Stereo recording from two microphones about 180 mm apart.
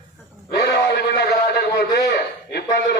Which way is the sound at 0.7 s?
70° left (ahead or behind).